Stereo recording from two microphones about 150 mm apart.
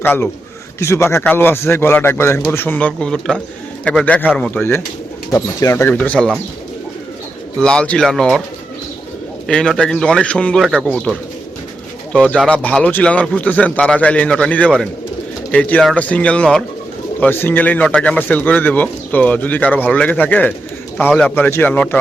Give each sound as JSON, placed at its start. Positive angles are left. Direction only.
{"t": 0.0, "sound": "a man's voice", "side_deg": 15}
{"t": 7.6, "sound": "speech", "side_deg": 5}
{"t": 9.5, "sound": "a man's voice", "side_deg": 5}
{"t": 12.1, "sound": "a man's voice", "side_deg": 5}